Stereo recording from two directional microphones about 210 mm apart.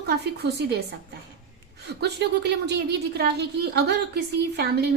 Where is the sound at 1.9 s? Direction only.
55° right (ahead or behind).